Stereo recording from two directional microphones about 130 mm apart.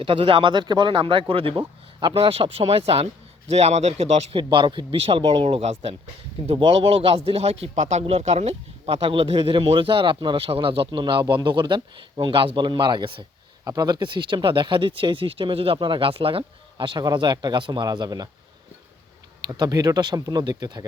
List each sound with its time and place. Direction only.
0.0 s a man's voice: 45° right (ahead or behind)
4.4 s a man's voice: 35° right (ahead or behind)
19.5 s speech: 30° right (ahead or behind)